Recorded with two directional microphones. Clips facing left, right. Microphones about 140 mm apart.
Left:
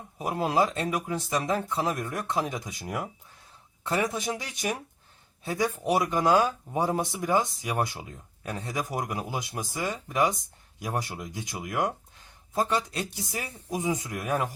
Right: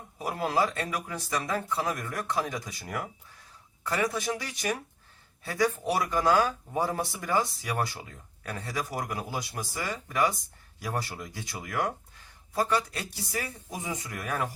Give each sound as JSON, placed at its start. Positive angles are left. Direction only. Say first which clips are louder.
{"t": 0.2, "sound": "speech", "louder": "left 2 dB", "side_deg": 20}